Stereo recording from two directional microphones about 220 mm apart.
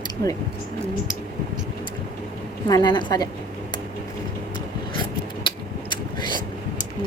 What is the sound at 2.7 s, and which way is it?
Speech, 20° left (ahead or behind).